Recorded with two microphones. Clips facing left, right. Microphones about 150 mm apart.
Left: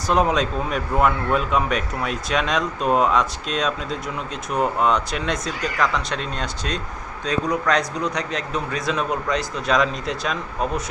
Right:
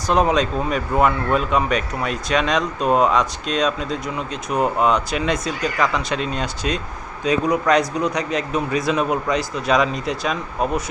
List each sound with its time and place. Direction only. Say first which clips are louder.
0.1 s speech: right 2 dB; centre (ahead or behind)